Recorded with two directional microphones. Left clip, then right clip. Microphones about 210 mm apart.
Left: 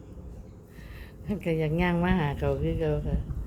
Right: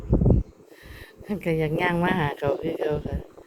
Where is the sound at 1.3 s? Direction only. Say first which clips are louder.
Right 3 dB; 15° right (ahead or behind).